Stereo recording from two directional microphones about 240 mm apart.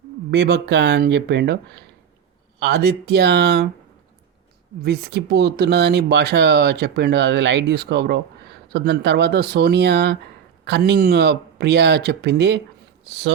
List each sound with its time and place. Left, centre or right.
0.3 s speech: right
4.8 s speech: right